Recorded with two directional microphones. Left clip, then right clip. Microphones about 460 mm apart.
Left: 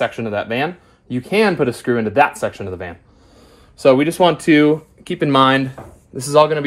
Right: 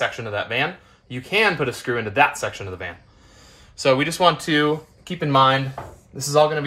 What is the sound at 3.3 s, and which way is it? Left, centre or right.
Speech, centre.